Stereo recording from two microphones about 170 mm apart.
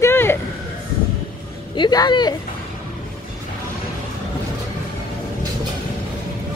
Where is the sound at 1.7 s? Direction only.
25° left (ahead or behind).